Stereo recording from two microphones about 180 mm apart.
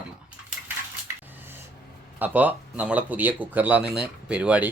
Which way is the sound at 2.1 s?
10° right (ahead or behind).